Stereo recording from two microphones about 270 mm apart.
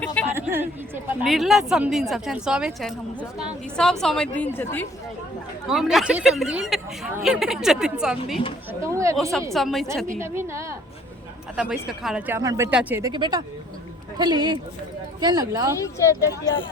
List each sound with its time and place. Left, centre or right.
0.0 s a woman's voice: centre
0.3 s a woman's voice: centre
9.5 s a woman's voice: centre
10.2 s speech: centre
15.8 s speech: centre